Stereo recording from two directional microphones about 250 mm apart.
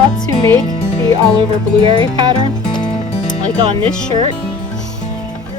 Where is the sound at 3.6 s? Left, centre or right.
Right.